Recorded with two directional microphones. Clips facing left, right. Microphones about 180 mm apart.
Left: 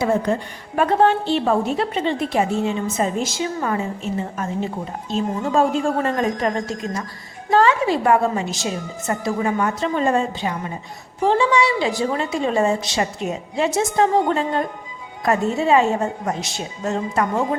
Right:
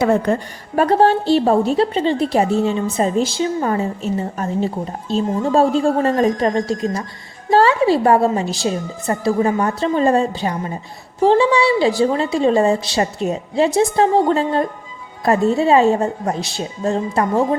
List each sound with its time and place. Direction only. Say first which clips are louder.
0.0 s a woman's voice: right 4 dB; 65° right (ahead or behind)
0.8 s a woman's voice: right 3 dB; 40° right (ahead or behind)